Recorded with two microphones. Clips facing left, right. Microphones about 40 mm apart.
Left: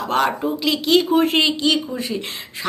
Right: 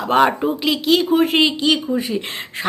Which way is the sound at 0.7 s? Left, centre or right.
Centre.